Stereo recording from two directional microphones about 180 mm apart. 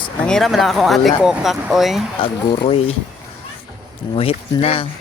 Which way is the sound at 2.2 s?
30° left (ahead or behind).